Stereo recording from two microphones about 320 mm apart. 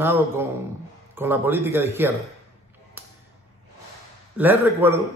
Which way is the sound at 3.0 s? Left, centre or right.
Centre.